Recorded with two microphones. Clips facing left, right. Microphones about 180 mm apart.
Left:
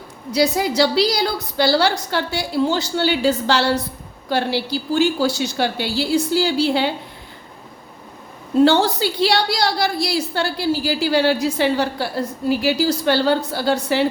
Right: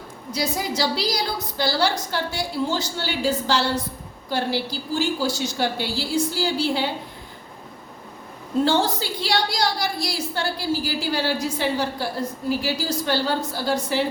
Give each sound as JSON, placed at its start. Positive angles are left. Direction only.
{"t": 0.3, "sound": "a woman's voice", "side_deg": 70}
{"t": 8.6, "sound": "a woman's voice", "side_deg": 70}